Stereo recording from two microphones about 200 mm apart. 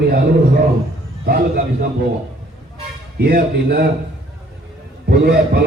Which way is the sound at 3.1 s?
50° right (ahead or behind).